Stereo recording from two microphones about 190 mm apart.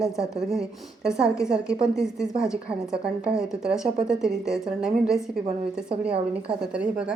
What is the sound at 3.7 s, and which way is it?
A woman's voice, 5° right (ahead or behind).